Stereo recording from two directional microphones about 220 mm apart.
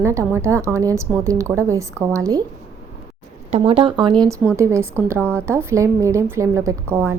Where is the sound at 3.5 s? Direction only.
25° right (ahead or behind).